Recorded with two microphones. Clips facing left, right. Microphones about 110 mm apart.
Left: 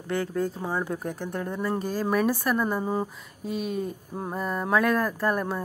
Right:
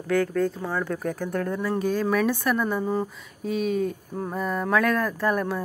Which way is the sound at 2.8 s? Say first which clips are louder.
Right 2 dB; 15° left (ahead or behind).